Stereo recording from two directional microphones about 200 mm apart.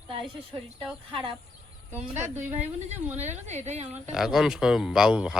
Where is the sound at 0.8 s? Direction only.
Centre (ahead or behind).